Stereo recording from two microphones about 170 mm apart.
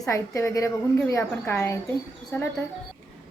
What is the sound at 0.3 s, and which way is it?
A woman's voice, 15° left (ahead or behind).